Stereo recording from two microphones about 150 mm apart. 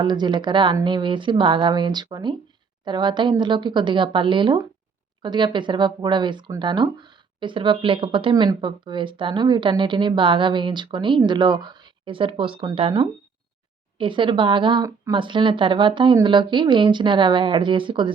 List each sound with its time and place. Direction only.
0.0 s speech: 30° right (ahead or behind)